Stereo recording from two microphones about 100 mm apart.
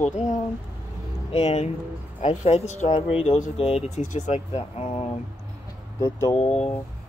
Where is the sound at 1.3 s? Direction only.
90° left.